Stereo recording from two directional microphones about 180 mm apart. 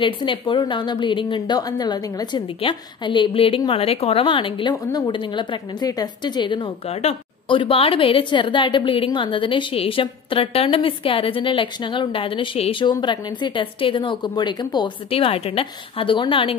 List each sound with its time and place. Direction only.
0.0 s a woman's voice: 25° left (ahead or behind)